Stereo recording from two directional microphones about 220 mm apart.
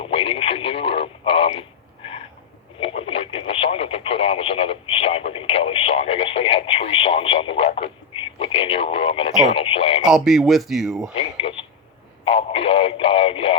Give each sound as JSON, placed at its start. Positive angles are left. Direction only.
{"t": 0.0, "sound": "radio", "side_deg": 25}
{"t": 2.8, "sound": "speech", "side_deg": 25}
{"t": 10.0, "sound": "speech", "side_deg": 0}
{"t": 11.1, "sound": "speech", "side_deg": 25}